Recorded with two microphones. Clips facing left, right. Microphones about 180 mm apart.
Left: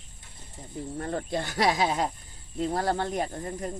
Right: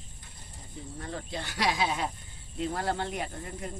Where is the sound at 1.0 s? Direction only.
50° left (ahead or behind).